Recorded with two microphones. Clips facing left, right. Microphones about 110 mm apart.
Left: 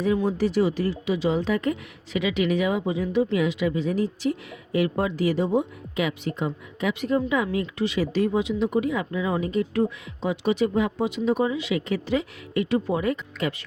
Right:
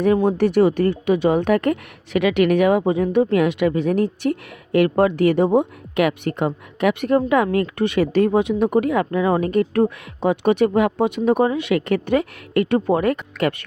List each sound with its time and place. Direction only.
0.0 s speech: 60° right (ahead or behind)